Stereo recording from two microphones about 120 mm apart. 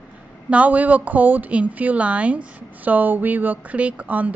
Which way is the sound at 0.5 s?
10° right (ahead or behind).